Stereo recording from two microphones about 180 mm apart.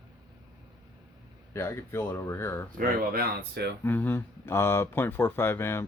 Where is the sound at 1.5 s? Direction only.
15° left (ahead or behind).